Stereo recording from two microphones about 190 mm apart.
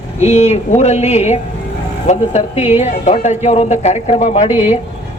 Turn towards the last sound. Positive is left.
turn(degrees=-10)  # may be behind; listen again after turning